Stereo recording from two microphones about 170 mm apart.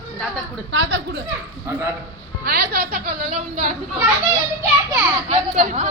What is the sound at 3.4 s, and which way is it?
Speech, 45° right (ahead or behind).